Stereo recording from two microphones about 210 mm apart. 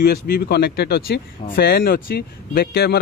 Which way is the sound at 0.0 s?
45° left (ahead or behind).